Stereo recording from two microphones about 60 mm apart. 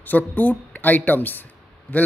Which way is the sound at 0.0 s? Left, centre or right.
Left.